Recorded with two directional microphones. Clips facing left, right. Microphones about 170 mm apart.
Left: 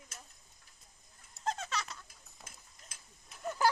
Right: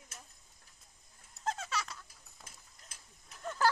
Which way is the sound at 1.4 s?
5° right (ahead or behind).